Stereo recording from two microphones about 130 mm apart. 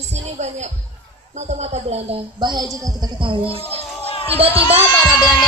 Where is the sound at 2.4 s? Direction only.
35° right (ahead or behind).